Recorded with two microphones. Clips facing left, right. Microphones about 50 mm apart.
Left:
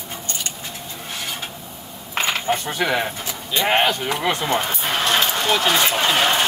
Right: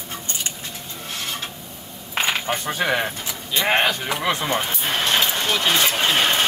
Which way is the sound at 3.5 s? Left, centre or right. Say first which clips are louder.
Left 1 dB; centre.